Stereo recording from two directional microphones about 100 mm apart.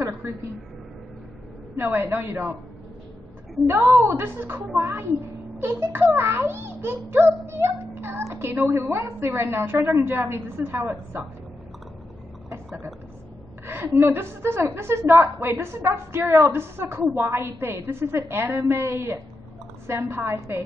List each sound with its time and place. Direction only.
1.8 s a child's voice: 25° right (ahead or behind)
3.6 s a child's voice: 25° right (ahead or behind)
13.7 s a child's voice: 25° right (ahead or behind)